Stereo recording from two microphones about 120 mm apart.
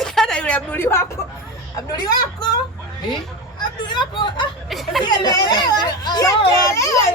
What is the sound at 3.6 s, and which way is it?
Speech, 40° left (ahead or behind).